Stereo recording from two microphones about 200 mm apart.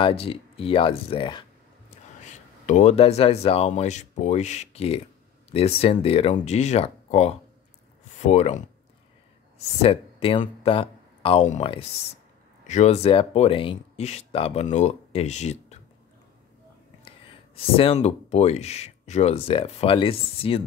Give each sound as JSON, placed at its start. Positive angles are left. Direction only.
{"t": 0.0, "sound": "speech", "side_deg": 30}
{"t": 2.2, "sound": "speech", "side_deg": 35}
{"t": 9.8, "sound": "speech", "side_deg": 30}
{"t": 17.7, "sound": "speech", "side_deg": 30}